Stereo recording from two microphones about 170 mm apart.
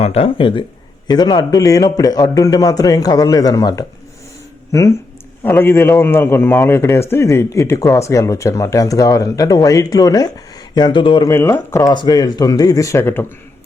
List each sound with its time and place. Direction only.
0.0 s a man's voice: 35° left (ahead or behind)
11.3 s a man's voice: 15° left (ahead or behind)